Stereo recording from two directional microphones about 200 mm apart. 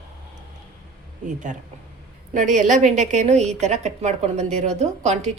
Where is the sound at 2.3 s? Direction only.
40° right (ahead or behind).